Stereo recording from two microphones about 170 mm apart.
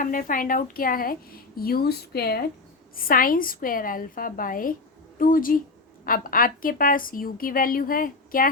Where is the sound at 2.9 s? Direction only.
55° left (ahead or behind).